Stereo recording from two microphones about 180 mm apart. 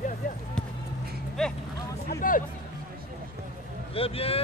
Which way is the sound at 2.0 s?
50° left (ahead or behind).